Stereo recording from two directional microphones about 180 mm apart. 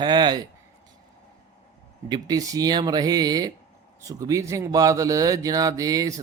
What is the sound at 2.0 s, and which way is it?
A man's voice, 20° right (ahead or behind).